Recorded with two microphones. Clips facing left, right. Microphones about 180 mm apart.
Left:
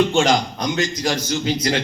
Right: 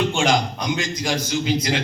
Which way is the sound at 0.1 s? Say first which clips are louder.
Left 3 dB; 40° left (ahead or behind).